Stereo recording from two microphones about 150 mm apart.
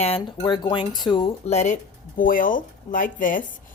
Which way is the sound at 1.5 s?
50° left (ahead or behind).